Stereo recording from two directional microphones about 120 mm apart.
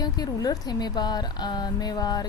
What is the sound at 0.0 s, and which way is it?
A woman's voice, 35° left (ahead or behind).